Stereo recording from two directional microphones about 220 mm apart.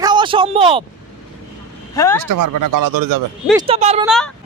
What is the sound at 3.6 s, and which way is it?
Speech, 25° right (ahead or behind).